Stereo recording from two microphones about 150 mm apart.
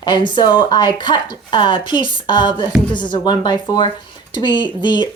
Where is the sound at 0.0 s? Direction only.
30° left (ahead or behind).